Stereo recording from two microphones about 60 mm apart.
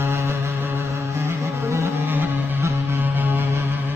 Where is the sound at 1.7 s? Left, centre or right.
Right.